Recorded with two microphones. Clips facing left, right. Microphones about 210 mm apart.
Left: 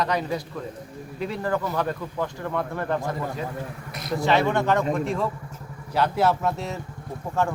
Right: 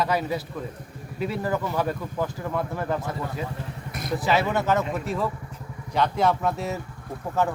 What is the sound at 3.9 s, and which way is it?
Vehicle, 50° right (ahead or behind).